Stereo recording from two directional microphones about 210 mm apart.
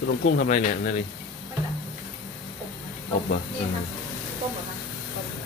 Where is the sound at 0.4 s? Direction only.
40° left (ahead or behind).